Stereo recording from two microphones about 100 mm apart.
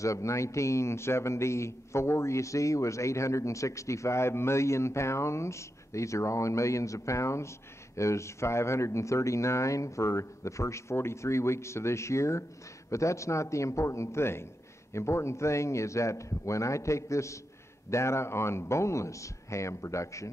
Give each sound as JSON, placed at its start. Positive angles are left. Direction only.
{"t": 0.0, "sound": "a man's voice", "side_deg": 30}